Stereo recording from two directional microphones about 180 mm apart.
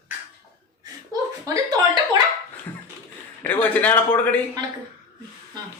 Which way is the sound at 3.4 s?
10° left (ahead or behind).